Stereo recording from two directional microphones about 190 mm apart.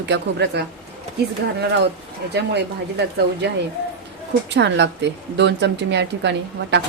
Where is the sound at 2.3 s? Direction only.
60° right (ahead or behind).